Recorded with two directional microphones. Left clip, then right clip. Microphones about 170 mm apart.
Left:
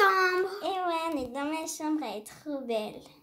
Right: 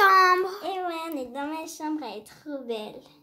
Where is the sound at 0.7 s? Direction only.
5° left (ahead or behind).